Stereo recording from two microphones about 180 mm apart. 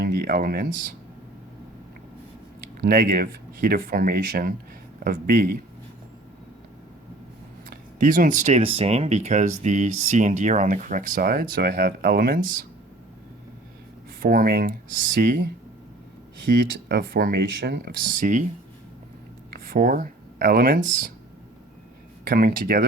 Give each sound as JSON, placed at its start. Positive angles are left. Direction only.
{"t": 0.0, "sound": "speech", "side_deg": -55}
{"t": 2.8, "sound": "speech", "side_deg": -50}
{"t": 7.7, "sound": "speech", "side_deg": -50}
{"t": 14.2, "sound": "speech", "side_deg": -55}
{"t": 16.5, "sound": "speech", "side_deg": -55}
{"t": 18.1, "sound": "speech", "side_deg": -45}
{"t": 19.5, "sound": "speech", "side_deg": -55}
{"t": 22.3, "sound": "speech", "side_deg": -50}